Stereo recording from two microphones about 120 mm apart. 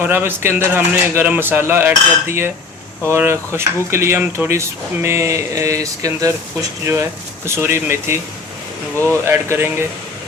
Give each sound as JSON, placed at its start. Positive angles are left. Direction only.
{"t": 0.0, "sound": "speech", "side_deg": -15}